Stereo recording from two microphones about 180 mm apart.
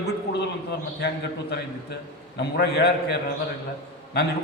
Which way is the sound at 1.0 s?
70° left (ahead or behind).